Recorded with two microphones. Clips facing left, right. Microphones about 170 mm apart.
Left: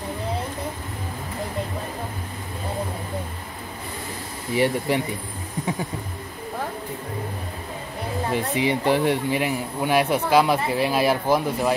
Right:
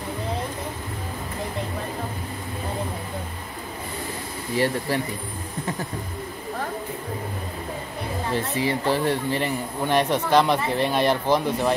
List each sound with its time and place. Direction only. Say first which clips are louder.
4.6 s speech: left 2 dB; 15° left (ahead or behind)
8.3 s speech: left 2 dB; 15° left (ahead or behind)